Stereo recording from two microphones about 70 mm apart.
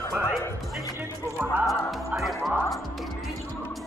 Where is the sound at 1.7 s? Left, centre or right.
Centre.